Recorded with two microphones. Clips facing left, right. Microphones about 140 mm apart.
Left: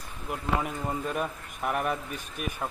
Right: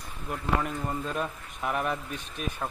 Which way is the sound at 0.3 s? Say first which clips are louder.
Even; 10° left (ahead or behind).